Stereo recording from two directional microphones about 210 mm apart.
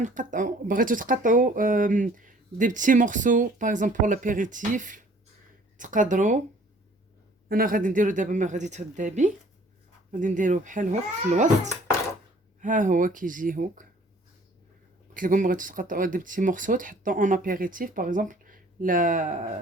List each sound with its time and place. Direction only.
0.0 s speech: 35° right (ahead or behind)
7.4 s speech: 45° right (ahead or behind)
15.1 s speech: 40° right (ahead or behind)